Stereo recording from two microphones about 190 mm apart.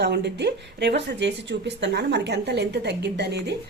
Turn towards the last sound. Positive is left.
turn(degrees=-60)  # may be behind; listen again after turning